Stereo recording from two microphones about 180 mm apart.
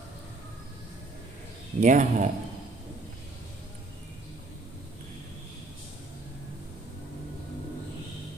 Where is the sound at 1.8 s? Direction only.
45° right (ahead or behind).